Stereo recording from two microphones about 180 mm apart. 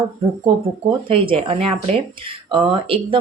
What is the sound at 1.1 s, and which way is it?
Speech, 30° right (ahead or behind).